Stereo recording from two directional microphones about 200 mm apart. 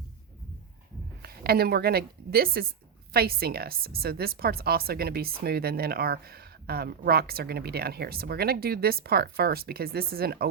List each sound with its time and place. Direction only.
1.2 s speech: 50° right (ahead or behind)